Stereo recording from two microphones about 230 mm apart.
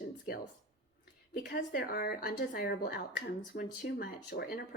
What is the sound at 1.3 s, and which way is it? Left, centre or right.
A woman's voice, left.